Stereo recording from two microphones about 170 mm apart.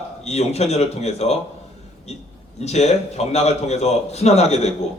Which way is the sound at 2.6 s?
40° left (ahead or behind).